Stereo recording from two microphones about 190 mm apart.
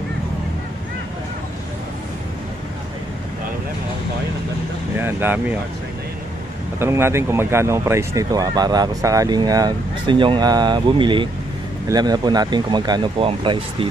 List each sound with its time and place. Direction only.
4.9 s speech: 10° right (ahead or behind)
6.8 s speech: 15° right (ahead or behind)